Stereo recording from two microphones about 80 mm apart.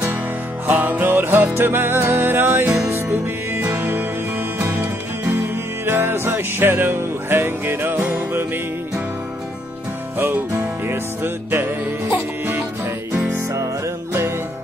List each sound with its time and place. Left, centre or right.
0.7 s music: right
10.1 s music: right